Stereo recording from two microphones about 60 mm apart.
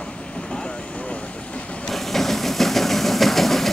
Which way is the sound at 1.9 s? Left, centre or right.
Centre.